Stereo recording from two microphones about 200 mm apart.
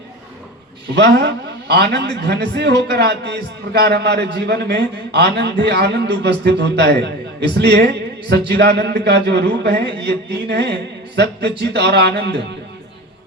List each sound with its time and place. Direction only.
0.9 s a man's voice: 55° right (ahead or behind)